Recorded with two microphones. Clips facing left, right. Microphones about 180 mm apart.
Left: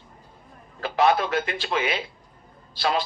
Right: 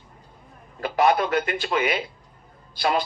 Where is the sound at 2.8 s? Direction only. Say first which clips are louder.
Right 1 dB; 15° right (ahead or behind).